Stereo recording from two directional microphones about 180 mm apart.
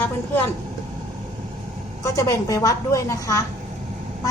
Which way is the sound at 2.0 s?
15° left (ahead or behind).